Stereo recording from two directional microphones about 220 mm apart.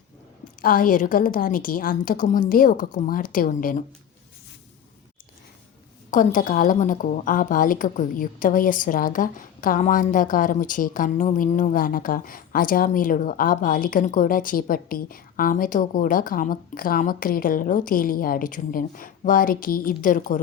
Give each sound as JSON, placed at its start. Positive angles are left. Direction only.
{"t": 0.6, "sound": "a woman's voice", "side_deg": 40}
{"t": 6.1, "sound": "a woman's voice", "side_deg": 35}